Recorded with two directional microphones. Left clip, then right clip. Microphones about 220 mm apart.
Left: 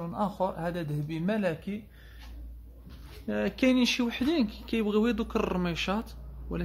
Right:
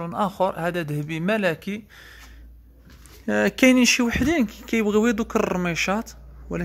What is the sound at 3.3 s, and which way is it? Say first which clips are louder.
A man's voice: right 9 dB; 40° right (ahead or behind).